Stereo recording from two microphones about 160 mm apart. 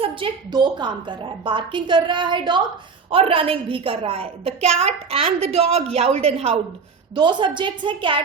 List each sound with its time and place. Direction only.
0.0 s a woman's voice: 30° right (ahead or behind)